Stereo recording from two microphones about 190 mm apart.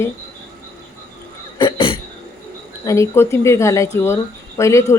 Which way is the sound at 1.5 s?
25° left (ahead or behind).